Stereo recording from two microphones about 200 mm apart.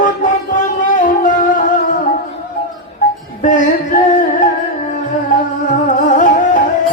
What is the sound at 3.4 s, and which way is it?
Music, 40° left (ahead or behind).